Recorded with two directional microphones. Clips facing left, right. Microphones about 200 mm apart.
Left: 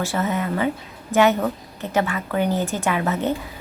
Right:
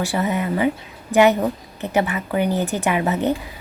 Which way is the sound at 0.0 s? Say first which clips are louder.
Right 2 dB; 15° right (ahead or behind).